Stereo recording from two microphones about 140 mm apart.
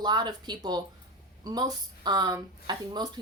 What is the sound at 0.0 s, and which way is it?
Speech, 30° right (ahead or behind).